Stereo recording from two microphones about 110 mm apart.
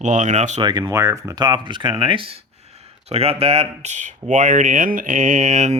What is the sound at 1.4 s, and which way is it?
Speech, 45° right (ahead or behind).